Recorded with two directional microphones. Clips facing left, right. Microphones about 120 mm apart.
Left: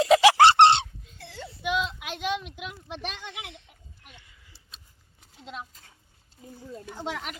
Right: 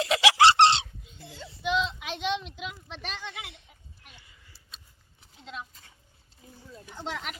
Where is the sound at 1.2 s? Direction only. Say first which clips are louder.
Left 3 dB; 70° left (ahead or behind).